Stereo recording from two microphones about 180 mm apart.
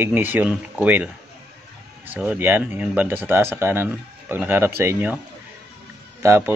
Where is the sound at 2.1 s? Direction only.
10° right (ahead or behind).